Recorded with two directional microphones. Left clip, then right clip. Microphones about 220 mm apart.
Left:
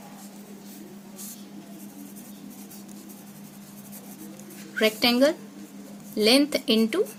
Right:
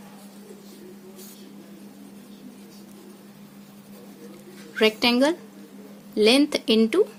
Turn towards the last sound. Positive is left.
turn(degrees=-15)  # may be behind; listen again after turning